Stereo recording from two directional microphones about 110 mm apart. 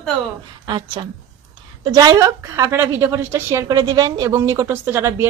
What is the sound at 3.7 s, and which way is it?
Speech, 35° right (ahead or behind).